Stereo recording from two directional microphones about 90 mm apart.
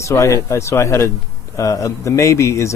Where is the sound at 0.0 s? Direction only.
30° left (ahead or behind).